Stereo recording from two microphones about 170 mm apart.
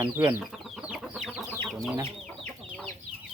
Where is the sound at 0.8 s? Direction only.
5° right (ahead or behind).